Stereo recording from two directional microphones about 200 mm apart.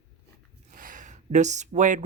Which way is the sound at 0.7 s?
45° right (ahead or behind).